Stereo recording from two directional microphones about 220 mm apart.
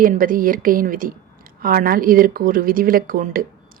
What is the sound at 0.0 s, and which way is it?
A woman's voice, 40° right (ahead or behind).